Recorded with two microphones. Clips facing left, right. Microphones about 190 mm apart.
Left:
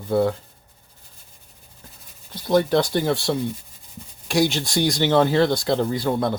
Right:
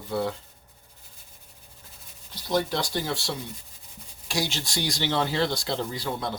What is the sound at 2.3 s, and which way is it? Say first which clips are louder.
Speech: left 8 dB; 55° left (ahead or behind).